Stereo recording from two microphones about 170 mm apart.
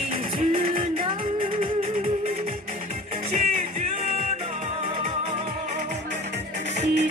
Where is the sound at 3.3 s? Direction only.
40° right (ahead or behind).